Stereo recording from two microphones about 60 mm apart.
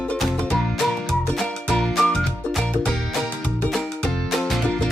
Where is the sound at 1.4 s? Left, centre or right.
Centre.